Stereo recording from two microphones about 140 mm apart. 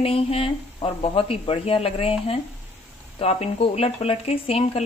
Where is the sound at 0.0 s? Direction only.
45° left (ahead or behind).